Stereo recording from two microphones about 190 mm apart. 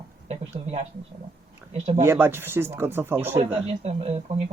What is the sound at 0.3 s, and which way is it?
Speech, 35° right (ahead or behind).